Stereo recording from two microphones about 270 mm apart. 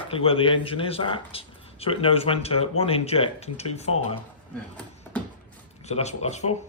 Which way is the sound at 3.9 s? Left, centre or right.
Left.